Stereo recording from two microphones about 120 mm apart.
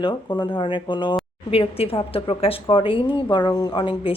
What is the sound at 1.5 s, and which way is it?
A woman's voice, 55° left (ahead or behind).